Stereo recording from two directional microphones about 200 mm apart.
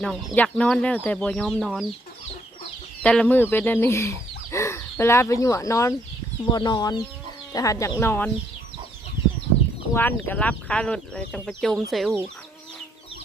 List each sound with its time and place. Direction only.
0.0 s speech: 5° left (ahead or behind)
3.0 s speech: 5° left (ahead or behind)
9.9 s speech: 10° left (ahead or behind)